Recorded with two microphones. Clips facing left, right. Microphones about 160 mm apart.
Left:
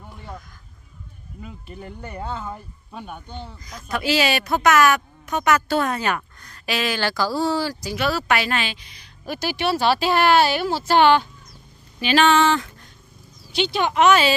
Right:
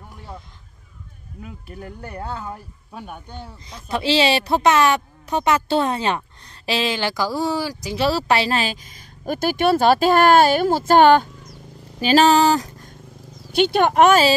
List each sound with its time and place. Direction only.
0.1 s a sound: 5° right (ahead or behind)
1.4 s speech: centre (ahead or behind)
3.6 s speech: 30° right (ahead or behind)
7.9 s a woman's voice: 30° right (ahead or behind)
13.5 s a woman's voice: 55° right (ahead or behind)